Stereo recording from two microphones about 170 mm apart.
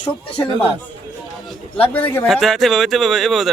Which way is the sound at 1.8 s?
10° left (ahead or behind).